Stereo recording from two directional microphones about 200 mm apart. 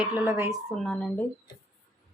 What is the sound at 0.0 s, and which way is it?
Speech, 10° right (ahead or behind).